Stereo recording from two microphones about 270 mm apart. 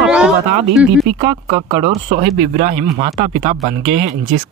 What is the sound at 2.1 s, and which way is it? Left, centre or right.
Speech, right.